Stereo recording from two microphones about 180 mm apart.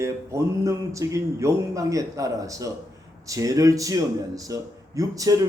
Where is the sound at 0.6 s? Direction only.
15° right (ahead or behind).